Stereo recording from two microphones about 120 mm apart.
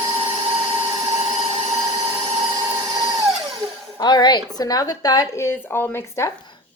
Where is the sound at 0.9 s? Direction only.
25° right (ahead or behind).